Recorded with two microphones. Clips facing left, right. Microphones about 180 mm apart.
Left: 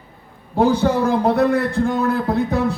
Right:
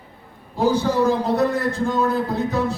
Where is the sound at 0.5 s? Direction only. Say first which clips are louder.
Left 3 dB; 60° left (ahead or behind).